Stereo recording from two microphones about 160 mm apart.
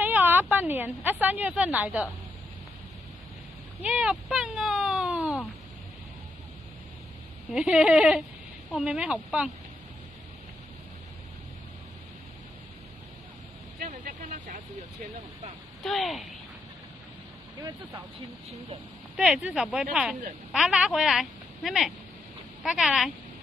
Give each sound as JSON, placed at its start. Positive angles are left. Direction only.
{"t": 0.0, "sound": "a sound", "side_deg": -10}
{"t": 1.2, "sound": "a woman's voice", "side_deg": -10}
{"t": 3.8, "sound": "a woman's voice", "side_deg": -5}
{"t": 7.5, "sound": "a woman's voice", "side_deg": -5}
{"t": 13.7, "sound": "vehicle", "side_deg": -55}
{"t": 15.8, "sound": "a woman's voice", "side_deg": 0}
{"t": 17.6, "sound": "speech", "side_deg": -20}
{"t": 19.1, "sound": "a woman's voice", "side_deg": -5}